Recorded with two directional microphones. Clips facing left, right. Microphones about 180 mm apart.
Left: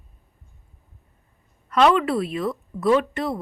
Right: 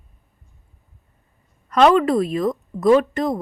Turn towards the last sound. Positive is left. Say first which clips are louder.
# right 4 dB
turn(degrees=-40)  # may be behind; listen again after turning